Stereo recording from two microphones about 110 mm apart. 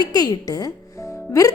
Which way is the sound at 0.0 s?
35° left (ahead or behind).